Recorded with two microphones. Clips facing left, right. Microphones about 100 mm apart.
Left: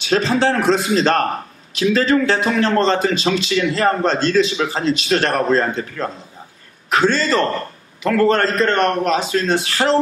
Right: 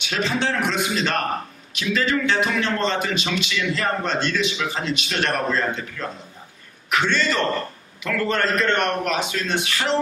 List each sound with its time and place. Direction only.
0.0 s a man's voice: 35° left (ahead or behind)